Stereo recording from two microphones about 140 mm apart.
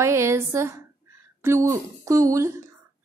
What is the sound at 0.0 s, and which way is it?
A woman's voice, 20° right (ahead or behind).